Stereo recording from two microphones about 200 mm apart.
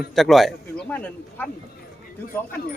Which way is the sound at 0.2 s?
Centre (ahead or behind).